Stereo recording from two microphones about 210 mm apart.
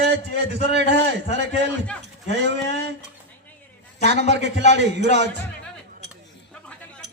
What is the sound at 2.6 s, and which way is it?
Speech, 55° right (ahead or behind).